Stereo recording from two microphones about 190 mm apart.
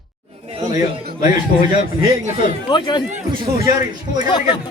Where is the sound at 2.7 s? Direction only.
25° left (ahead or behind).